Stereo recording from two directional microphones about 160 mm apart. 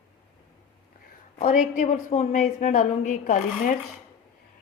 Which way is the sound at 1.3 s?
55° left (ahead or behind).